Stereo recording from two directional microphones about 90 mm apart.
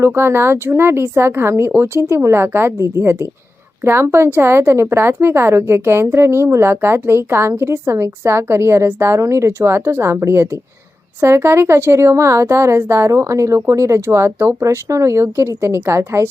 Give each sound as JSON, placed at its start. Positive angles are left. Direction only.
{"t": 0.0, "sound": "a woman's voice", "side_deg": -25}